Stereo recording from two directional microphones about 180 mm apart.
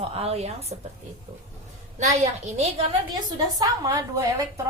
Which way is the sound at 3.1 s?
20° right (ahead or behind).